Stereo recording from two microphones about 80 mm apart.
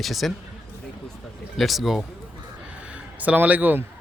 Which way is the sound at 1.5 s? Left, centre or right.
Centre.